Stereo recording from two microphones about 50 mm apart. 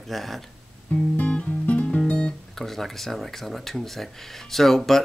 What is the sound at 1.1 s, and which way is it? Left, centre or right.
Music, left.